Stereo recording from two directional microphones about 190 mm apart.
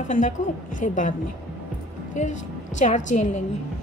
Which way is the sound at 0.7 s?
40° left (ahead or behind).